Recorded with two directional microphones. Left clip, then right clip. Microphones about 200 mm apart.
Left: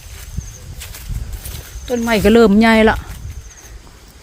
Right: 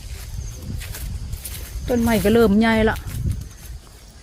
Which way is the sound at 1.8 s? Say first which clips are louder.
Left 4 dB; 30° left (ahead or behind).